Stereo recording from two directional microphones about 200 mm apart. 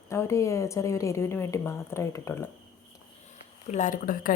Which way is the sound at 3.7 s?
40° left (ahead or behind).